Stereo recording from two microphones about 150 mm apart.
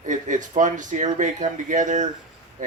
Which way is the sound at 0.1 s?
55° right (ahead or behind).